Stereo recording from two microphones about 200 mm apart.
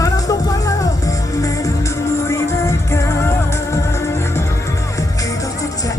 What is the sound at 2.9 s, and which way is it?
Music, 15° left (ahead or behind).